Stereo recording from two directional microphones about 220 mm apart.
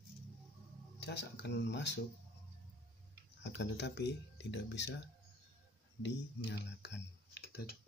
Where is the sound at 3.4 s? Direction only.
50° left (ahead or behind).